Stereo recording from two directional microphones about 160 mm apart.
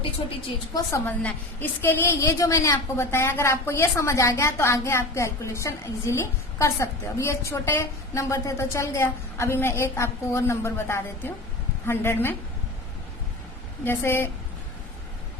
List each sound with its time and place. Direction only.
0.7 s a woman's voice: 20° left (ahead or behind)
13.8 s a woman's voice: 15° left (ahead or behind)